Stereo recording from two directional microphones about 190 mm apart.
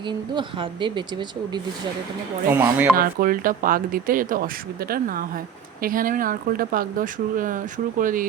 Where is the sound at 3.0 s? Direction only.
50° right (ahead or behind).